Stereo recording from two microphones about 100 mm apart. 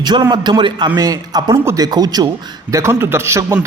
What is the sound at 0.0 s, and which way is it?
A man's voice, 45° right (ahead or behind).